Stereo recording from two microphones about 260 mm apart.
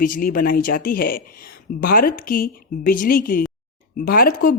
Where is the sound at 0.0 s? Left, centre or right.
Left.